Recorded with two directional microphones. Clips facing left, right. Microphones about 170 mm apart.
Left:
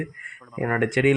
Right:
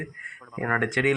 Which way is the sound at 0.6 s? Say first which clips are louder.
Left 4 dB; 15° left (ahead or behind).